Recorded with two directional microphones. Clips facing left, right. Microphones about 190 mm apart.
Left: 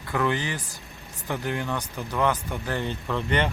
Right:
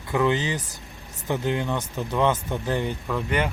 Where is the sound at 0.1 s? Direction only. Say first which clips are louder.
Right 3 dB; 20° right (ahead or behind).